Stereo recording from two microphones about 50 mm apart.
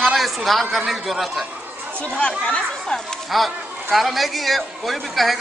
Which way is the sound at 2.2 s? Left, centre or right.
Left.